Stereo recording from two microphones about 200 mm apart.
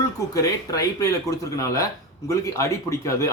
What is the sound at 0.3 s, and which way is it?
Speech, 15° left (ahead or behind).